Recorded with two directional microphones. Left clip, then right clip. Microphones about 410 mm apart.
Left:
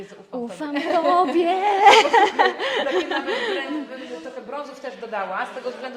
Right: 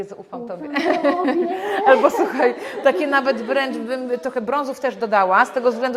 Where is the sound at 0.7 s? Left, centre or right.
Right.